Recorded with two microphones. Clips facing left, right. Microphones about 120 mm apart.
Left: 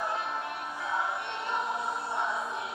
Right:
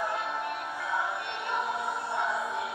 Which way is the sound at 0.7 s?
20° left (ahead or behind).